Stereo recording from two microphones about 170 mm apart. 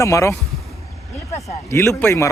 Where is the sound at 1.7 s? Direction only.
15° left (ahead or behind).